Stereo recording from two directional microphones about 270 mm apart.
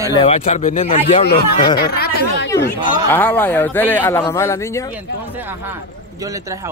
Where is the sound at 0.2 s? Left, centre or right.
Left.